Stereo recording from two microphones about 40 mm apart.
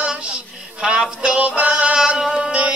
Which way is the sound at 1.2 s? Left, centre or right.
Right.